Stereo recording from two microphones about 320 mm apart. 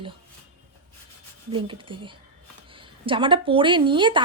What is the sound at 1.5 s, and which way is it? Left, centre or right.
Speech, centre.